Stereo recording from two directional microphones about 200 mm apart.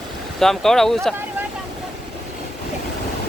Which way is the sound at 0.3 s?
Centre (ahead or behind).